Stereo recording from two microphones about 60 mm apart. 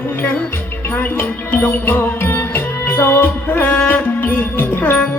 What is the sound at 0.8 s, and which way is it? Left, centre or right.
Music, left.